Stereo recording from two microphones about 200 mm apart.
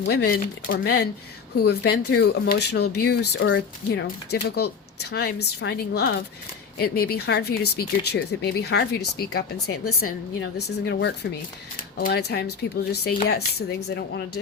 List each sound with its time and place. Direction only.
0.0 s speech: 55° left (ahead or behind)